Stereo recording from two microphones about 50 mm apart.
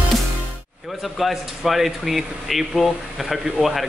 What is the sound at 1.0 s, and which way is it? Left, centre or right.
Speech, centre.